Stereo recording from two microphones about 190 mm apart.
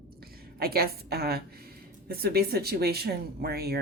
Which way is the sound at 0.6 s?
55° right (ahead or behind).